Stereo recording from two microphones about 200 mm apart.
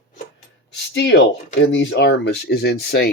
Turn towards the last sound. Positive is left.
turn(degrees=50)  # may be behind; listen again after turning